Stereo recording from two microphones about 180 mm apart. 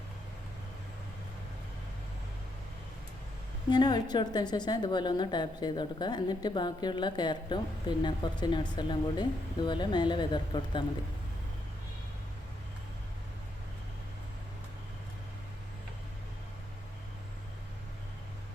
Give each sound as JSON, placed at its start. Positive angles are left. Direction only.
{"t": 3.7, "sound": "a woman's voice", "side_deg": 25}